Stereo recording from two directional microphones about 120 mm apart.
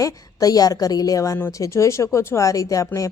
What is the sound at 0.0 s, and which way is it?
A woman's voice, 30° left (ahead or behind).